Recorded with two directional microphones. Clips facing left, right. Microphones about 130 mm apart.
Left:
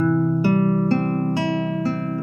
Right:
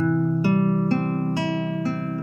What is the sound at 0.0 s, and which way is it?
Music, 70° left (ahead or behind).